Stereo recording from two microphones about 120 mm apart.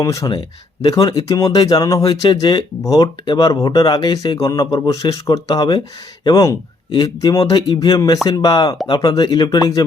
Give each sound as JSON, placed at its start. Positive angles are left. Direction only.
{"t": 0.0, "sound": "speech", "side_deg": 30}